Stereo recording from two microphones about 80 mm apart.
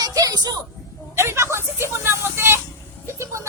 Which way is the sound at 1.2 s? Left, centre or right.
Right.